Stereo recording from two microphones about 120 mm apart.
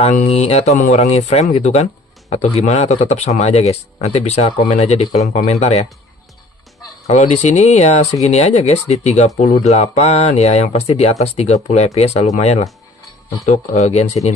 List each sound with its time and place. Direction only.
0.0 s speech: 60° left (ahead or behind)
7.1 s speech: 75° left (ahead or behind)